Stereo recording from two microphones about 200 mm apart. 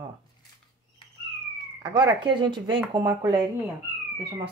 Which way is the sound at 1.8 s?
20° right (ahead or behind).